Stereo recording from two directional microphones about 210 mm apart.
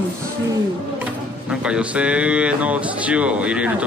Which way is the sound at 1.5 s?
5° right (ahead or behind).